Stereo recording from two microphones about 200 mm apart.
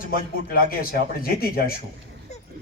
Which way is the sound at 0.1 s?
50° left (ahead or behind).